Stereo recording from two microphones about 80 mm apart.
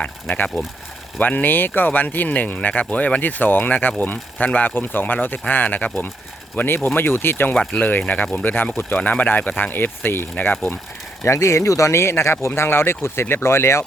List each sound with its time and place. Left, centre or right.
1.2 s speech: left
7.5 s speech: centre
7.8 s speech: left
11.2 s speech: left